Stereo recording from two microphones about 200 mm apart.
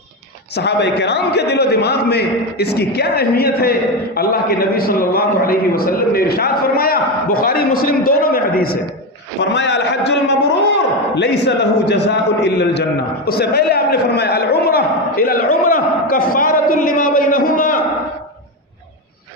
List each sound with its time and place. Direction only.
0.5 s a man's voice: 60° left (ahead or behind)
9.4 s a man's voice: 60° left (ahead or behind); by 17.8 s 45° left (ahead or behind)